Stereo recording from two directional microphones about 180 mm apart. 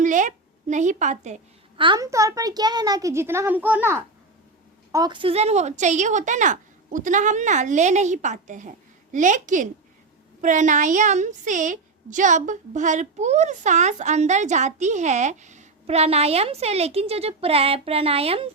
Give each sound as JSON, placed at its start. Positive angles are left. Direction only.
{"t": 0.0, "sound": "a woman's voice", "side_deg": -45}
{"t": 1.8, "sound": "a child's voice", "side_deg": -20}